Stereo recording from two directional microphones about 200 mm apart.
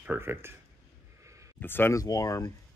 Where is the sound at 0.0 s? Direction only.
10° right (ahead or behind).